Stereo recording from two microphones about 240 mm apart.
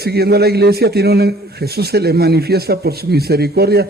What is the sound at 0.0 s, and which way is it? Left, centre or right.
A man's voice, right.